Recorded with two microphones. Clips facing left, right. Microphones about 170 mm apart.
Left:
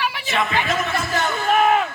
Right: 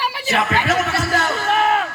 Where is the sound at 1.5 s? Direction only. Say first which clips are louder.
Left 2 dB; 15° left (ahead or behind).